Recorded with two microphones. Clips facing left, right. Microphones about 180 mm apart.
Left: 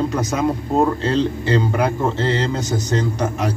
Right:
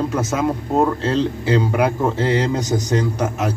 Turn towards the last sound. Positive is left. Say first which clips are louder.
# even
turn(degrees=-5)  # may be behind; listen again after turning